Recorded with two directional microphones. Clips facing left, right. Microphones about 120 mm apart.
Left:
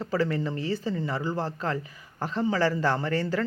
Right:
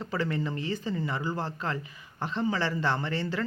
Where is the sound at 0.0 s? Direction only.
35° left (ahead or behind).